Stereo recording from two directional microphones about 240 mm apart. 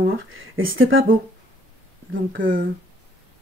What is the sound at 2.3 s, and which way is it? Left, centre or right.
Speech, right.